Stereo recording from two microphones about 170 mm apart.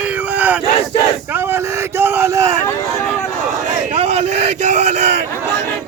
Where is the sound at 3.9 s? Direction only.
40° right (ahead or behind).